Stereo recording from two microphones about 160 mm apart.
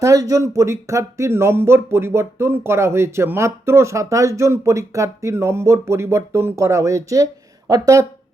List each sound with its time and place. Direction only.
0.0 s speech: 20° right (ahead or behind)